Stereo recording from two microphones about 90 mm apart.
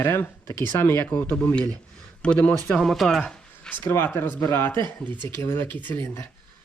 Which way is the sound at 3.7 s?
25° left (ahead or behind).